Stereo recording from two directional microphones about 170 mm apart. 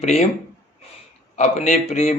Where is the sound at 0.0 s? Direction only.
40° left (ahead or behind).